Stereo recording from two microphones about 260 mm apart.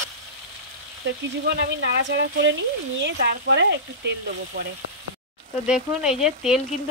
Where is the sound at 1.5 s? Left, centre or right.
Right.